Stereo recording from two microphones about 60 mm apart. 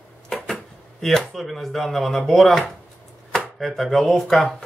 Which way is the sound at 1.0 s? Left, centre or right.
Centre.